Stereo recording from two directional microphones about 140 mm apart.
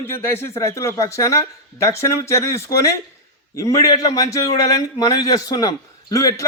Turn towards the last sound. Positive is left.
turn(degrees=25)  # may be behind; listen again after turning